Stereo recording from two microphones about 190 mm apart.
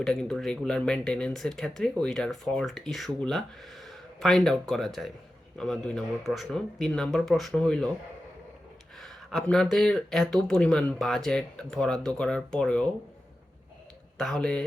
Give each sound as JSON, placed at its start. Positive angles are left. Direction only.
{"t": 0.0, "sound": "speech", "side_deg": 5}
{"t": 9.0, "sound": "speech", "side_deg": 0}
{"t": 14.2, "sound": "speech", "side_deg": 5}